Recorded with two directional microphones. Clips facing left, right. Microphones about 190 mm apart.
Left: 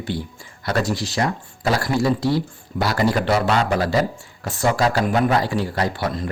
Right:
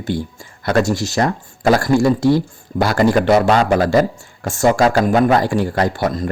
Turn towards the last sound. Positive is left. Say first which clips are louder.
# right 5 dB
turn(degrees=-45)  # may be behind; listen again after turning